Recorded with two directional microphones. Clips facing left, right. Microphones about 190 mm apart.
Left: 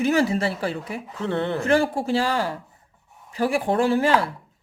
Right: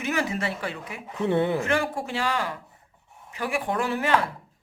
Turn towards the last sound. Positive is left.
turn(degrees=30)  # may be behind; listen again after turning